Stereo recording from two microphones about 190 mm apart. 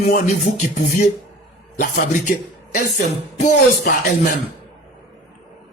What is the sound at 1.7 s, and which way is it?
Speech, 45° left (ahead or behind).